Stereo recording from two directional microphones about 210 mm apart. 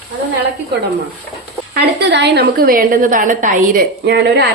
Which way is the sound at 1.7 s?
55° right (ahead or behind).